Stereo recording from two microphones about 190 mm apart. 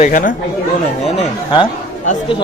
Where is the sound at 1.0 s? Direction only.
30° left (ahead or behind).